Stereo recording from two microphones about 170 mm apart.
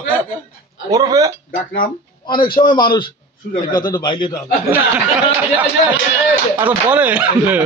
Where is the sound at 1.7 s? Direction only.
55° left (ahead or behind).